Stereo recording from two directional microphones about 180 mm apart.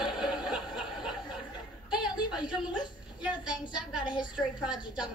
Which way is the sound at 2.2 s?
5° right (ahead or behind).